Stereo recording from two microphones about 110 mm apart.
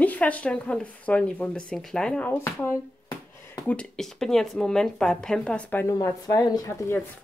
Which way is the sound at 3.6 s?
5° left (ahead or behind).